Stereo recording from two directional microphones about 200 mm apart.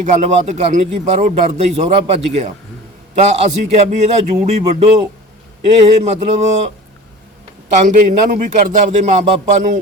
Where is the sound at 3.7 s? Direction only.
35° right (ahead or behind).